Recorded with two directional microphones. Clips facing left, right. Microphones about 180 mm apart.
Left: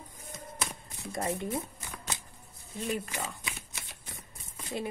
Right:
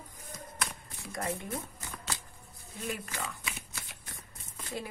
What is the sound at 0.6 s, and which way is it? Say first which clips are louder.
Shuffling cards: left 1 dB; 25° left (ahead or behind).